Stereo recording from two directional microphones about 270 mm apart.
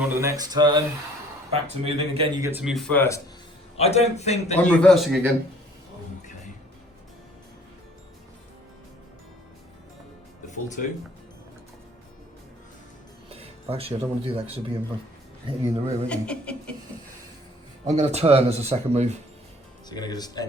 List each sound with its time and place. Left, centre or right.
0.2 s speech: centre
3.8 s a man's voice: left
4.6 s a man's voice: centre
13.3 s speech: right
16.0 s a man's voice: centre
17.8 s speech: right
19.9 s speech: centre